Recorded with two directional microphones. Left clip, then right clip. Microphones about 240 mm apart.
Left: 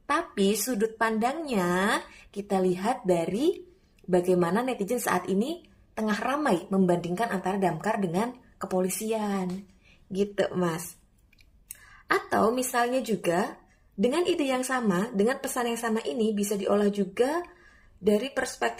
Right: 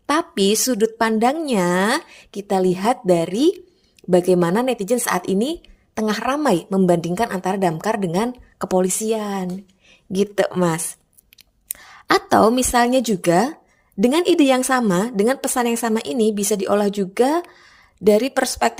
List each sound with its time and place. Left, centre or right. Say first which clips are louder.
0.0 s a woman's voice: right 7 dB; right